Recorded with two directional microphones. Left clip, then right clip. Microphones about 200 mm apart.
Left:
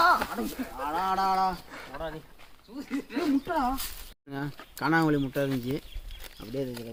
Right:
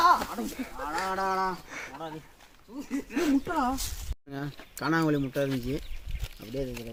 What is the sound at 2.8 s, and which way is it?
Speech, 30° right (ahead or behind).